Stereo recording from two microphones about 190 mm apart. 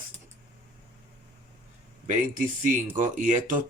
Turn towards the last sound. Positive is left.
turn(degrees=-45)  # may be behind; listen again after turning